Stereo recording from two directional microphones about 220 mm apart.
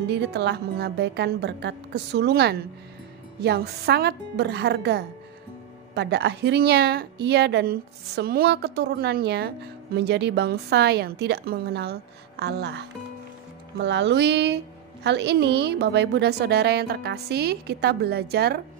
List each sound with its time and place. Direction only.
0.1 s a woman's voice: 50° right (ahead or behind)